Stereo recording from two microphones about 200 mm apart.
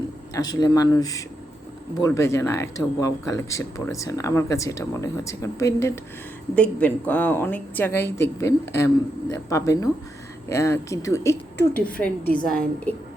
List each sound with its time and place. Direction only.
0.3 s speech: 20° left (ahead or behind)